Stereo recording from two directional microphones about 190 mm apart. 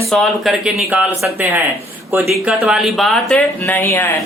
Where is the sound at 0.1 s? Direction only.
Centre (ahead or behind).